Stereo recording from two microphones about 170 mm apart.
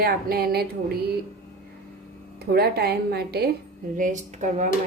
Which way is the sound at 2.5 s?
70° right (ahead or behind).